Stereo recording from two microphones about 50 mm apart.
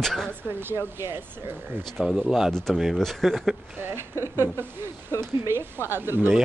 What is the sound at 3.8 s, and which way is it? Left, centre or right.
Speech, right.